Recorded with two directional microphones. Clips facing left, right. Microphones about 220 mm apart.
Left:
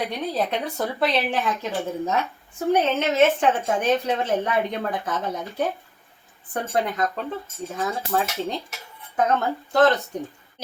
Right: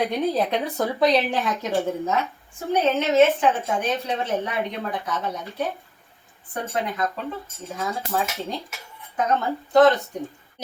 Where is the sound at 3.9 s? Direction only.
45° left (ahead or behind).